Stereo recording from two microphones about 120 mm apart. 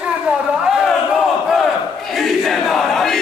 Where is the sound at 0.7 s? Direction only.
Centre (ahead or behind).